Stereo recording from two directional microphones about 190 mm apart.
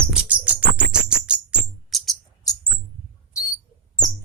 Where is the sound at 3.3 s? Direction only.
15° left (ahead or behind).